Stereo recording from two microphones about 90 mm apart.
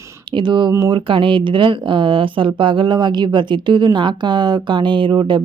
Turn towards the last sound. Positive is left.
turn(degrees=-60)  # may be behind; listen again after turning